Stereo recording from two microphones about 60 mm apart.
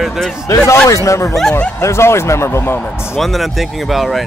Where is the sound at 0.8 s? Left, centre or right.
Left.